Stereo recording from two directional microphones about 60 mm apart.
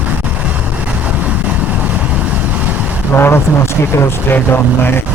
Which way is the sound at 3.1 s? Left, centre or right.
Left.